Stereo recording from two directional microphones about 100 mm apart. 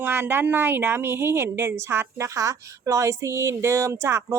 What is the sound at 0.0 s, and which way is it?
A woman's voice, 20° right (ahead or behind).